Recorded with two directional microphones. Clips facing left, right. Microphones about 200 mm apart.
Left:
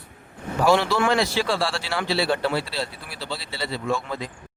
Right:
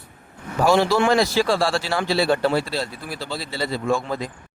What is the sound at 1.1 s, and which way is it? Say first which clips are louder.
Speech: right 4 dB; 40° right (ahead or behind).